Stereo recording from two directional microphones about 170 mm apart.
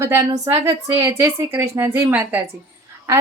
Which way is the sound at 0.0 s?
15° right (ahead or behind).